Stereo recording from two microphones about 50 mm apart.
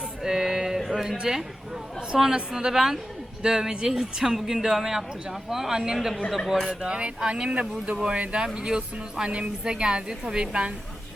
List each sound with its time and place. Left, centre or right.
0.2 s a sound: centre
0.8 s music: centre
1.2 s a woman's voice: centre
6.7 s speech: right